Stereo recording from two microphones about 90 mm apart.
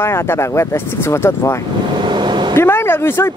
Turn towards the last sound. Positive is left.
turn(degrees=30)  # may be behind; listen again after turning